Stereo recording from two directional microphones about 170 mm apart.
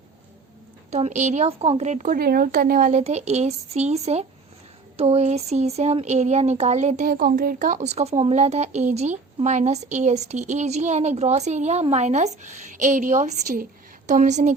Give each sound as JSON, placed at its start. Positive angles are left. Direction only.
{"t": 0.9, "sound": "a woman's voice", "side_deg": -40}
{"t": 2.1, "sound": "a woman's voice", "side_deg": -65}
{"t": 7.1, "sound": "speech", "side_deg": -60}